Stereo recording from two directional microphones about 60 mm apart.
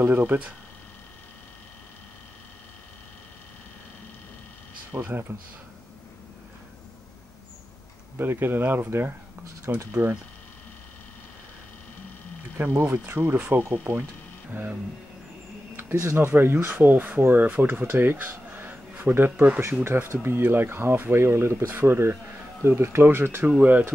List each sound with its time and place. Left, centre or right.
0.0 s speech: right
4.9 s speech: right
5.3 s speech: right
8.2 s speech: right
12.5 s speech: right
16.0 s speech: right
16.3 s speech: right
19.8 s speech: right